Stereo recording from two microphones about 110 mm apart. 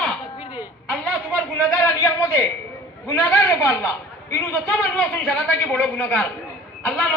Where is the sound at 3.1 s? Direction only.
25° left (ahead or behind).